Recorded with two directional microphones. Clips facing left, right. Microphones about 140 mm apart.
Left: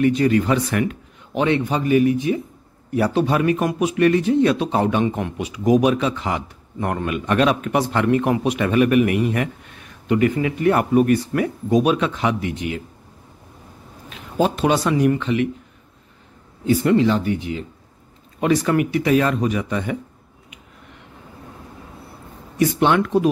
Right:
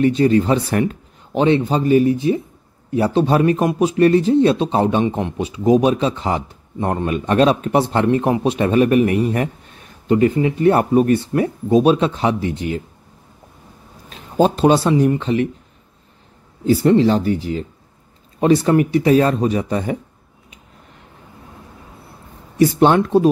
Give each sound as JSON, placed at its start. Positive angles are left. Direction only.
{"t": 0.0, "sound": "a man's voice", "side_deg": -30}
{"t": 14.0, "sound": "speech", "side_deg": -35}
{"t": 16.6, "sound": "a man's voice", "side_deg": -35}
{"t": 22.6, "sound": "a man's voice", "side_deg": -35}